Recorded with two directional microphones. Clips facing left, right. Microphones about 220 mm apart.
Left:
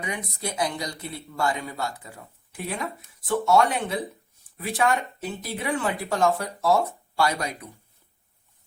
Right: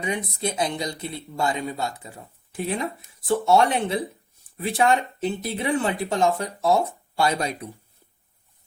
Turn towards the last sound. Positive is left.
turn(degrees=-25)  # may be behind; listen again after turning